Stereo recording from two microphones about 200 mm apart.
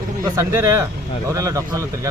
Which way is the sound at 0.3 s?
15° right (ahead or behind).